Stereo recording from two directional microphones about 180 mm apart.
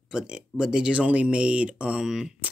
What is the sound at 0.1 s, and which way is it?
Speech, 5° right (ahead or behind).